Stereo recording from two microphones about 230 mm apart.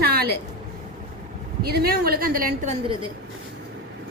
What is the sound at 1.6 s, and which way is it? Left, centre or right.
A woman's voice, right.